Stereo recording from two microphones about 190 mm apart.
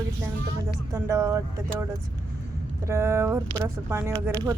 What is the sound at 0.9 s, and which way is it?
Speech, 15° right (ahead or behind).